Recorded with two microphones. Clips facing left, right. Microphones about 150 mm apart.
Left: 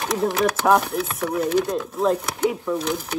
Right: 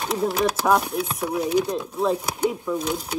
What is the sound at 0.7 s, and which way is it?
Speech, 10° right (ahead or behind).